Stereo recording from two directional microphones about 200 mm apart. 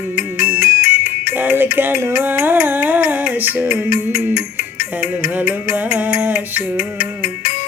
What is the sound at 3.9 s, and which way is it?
Music, 45° left (ahead or behind).